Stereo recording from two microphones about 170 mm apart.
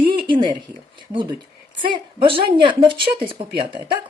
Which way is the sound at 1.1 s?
30° right (ahead or behind).